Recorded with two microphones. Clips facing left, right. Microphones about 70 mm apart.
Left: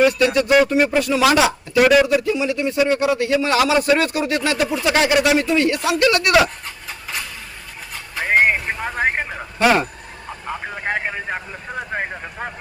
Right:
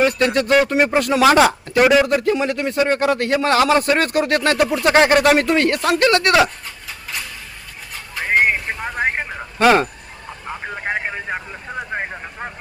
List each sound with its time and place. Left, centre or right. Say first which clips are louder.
0.0 s a man's voice: left 1 dB; right
1.8 s a man's voice: even; centre
2.0 s a man's voice: right 1 dB; right
8.1 s vehicle: left 1 dB; centre
10.6 s vehicle: right 1 dB; centre